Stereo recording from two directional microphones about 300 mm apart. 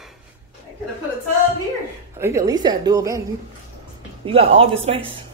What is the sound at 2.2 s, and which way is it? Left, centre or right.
A woman's voice, centre.